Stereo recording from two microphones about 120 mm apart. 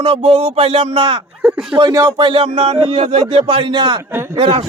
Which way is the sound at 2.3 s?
50° right (ahead or behind).